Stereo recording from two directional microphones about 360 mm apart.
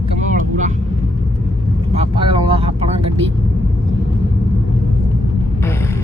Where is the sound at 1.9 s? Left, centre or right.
Centre.